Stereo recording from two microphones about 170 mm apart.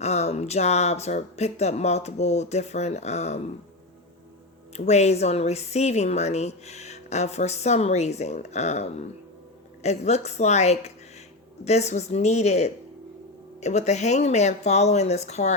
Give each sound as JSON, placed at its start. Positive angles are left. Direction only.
{"t": 0.0, "sound": "a woman's voice", "side_deg": 40}
{"t": 4.9, "sound": "a woman's voice", "side_deg": 40}